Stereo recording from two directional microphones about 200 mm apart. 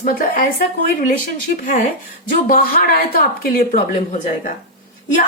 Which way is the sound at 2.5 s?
45° left (ahead or behind).